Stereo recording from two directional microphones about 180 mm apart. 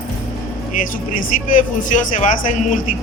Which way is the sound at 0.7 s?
50° left (ahead or behind).